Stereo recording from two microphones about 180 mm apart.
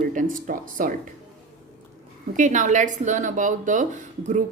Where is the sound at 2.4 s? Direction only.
45° right (ahead or behind).